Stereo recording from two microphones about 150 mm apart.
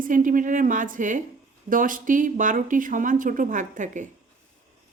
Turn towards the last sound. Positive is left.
turn(degrees=-55)  # may be behind; listen again after turning